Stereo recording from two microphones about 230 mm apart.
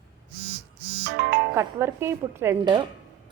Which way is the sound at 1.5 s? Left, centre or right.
Centre.